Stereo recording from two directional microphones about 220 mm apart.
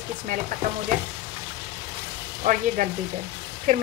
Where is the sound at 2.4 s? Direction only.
35° right (ahead or behind).